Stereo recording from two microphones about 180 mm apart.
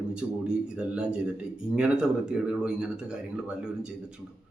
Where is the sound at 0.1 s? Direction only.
5° right (ahead or behind).